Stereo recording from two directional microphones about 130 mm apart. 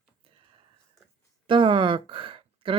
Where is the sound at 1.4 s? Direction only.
40° right (ahead or behind).